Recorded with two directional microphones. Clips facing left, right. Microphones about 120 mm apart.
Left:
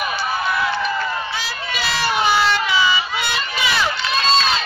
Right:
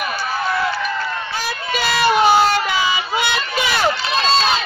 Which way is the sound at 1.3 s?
45° right (ahead or behind).